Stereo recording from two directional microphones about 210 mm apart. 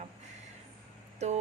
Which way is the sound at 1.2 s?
30° right (ahead or behind).